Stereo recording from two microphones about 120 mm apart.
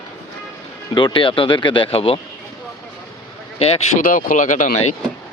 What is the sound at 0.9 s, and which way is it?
Speech, 45° left (ahead or behind).